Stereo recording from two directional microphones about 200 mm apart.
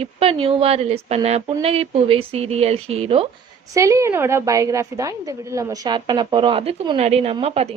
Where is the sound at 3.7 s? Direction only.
15° right (ahead or behind).